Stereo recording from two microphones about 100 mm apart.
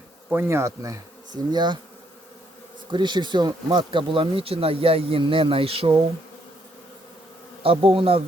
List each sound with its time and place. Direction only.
0.3 s speech: 25° right (ahead or behind); by 1.8 s 50° right (ahead or behind)
2.9 s speech: 50° right (ahead or behind); by 5.9 s 70° right (ahead or behind)
7.6 s bee: 65° right (ahead or behind)